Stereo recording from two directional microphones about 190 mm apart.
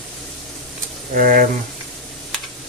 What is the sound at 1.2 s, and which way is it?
Speech, 45° right (ahead or behind).